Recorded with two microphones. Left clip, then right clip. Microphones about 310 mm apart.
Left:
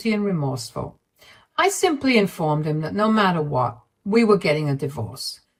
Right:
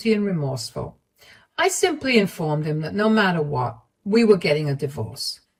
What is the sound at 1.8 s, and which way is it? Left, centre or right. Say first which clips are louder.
Speech: left 1 dB; left.